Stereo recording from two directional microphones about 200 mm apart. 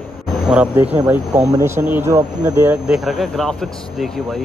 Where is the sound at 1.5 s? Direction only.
15° right (ahead or behind).